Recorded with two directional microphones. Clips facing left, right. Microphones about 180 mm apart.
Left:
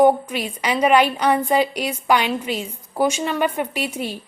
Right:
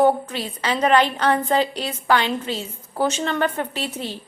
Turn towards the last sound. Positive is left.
turn(degrees=10)  # may be behind; listen again after turning